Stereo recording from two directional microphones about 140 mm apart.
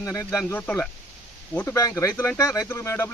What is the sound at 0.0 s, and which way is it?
Speech, 20° left (ahead or behind).